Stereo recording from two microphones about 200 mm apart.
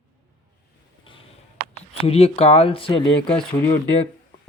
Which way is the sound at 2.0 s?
30° left (ahead or behind).